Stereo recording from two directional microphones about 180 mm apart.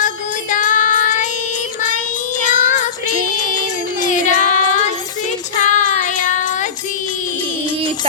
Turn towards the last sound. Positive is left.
turn(degrees=45)  # may be behind; listen again after turning